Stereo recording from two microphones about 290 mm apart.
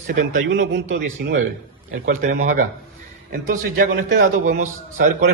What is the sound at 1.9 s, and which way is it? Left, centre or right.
A man's voice, right.